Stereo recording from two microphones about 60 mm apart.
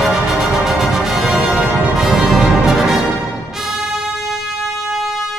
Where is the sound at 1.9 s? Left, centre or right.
Centre.